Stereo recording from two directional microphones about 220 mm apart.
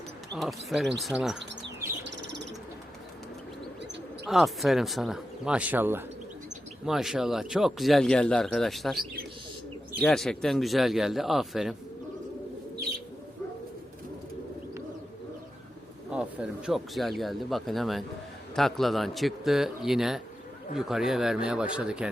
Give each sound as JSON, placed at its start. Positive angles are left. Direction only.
{"t": 0.3, "sound": "speech", "side_deg": 0}
{"t": 2.0, "sound": "bird", "side_deg": -50}
{"t": 4.3, "sound": "speech", "side_deg": 0}
{"t": 16.0, "sound": "speech", "side_deg": -5}